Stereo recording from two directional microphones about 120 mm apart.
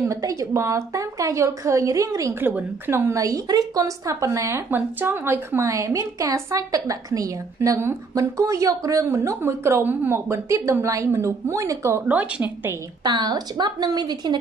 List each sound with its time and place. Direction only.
0.0 s a woman's voice: 30° right (ahead or behind)
12.1 s a woman's voice: 15° right (ahead or behind)
13.0 s a woman's voice: 35° right (ahead or behind)